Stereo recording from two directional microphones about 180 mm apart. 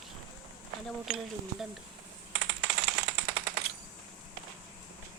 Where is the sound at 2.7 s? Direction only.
70° right (ahead or behind).